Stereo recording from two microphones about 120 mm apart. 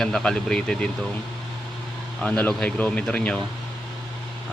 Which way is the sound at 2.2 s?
10° left (ahead or behind).